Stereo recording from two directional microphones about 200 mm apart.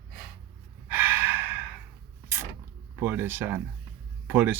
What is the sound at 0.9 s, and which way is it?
Gasp, 10° right (ahead or behind).